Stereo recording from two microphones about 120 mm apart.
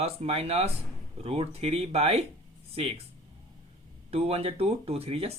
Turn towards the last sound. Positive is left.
turn(degrees=-55)  # may be behind; listen again after turning